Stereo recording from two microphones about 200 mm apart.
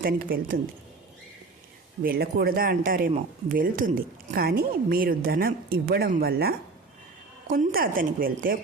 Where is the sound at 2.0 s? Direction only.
50° right (ahead or behind).